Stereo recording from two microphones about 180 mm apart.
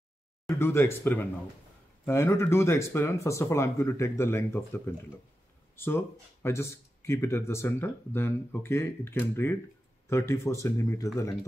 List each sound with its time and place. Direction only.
0.5 s speech: 15° left (ahead or behind)